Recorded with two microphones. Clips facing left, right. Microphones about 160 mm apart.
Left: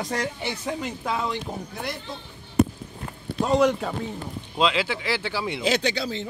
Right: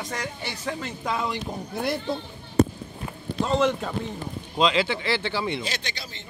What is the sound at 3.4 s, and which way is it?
Speech, 10° left (ahead or behind).